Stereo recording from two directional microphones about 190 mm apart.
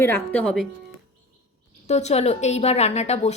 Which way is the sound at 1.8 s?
35° left (ahead or behind).